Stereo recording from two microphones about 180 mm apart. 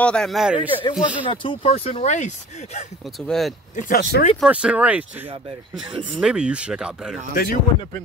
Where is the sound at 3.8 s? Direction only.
55° left (ahead or behind).